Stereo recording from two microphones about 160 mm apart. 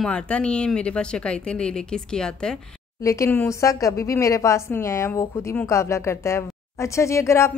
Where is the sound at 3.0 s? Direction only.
20° left (ahead or behind).